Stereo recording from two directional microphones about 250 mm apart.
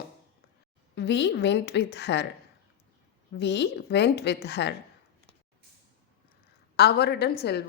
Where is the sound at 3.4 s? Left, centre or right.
Left.